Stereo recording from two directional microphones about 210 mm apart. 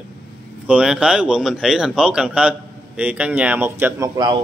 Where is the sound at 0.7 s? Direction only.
5° right (ahead or behind).